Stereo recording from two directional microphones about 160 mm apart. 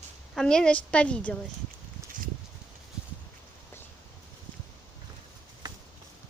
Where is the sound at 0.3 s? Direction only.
5° left (ahead or behind).